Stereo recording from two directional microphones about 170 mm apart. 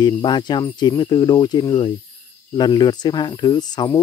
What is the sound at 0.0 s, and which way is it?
Speech, 25° left (ahead or behind).